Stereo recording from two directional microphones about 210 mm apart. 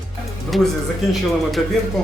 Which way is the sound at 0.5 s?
Centre (ahead or behind).